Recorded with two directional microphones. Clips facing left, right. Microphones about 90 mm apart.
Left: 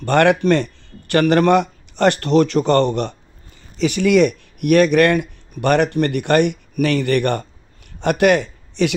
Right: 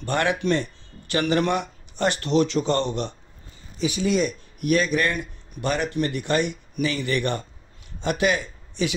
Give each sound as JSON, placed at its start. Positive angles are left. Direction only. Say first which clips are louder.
{"t": 0.0, "sound": "speech", "louder": "left 9 dB", "side_deg": 65}